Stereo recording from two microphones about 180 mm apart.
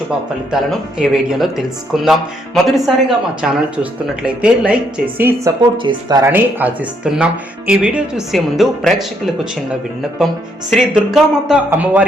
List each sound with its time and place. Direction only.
0.5 s a woman's voice: centre (ahead or behind)
5.7 s speech: 25° right (ahead or behind)
6.2 s a woman's voice: 10° right (ahead or behind)
10.8 s speech: centre (ahead or behind)